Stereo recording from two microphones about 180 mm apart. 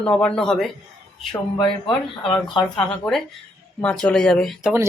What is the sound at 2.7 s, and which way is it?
Speech, 5° left (ahead or behind).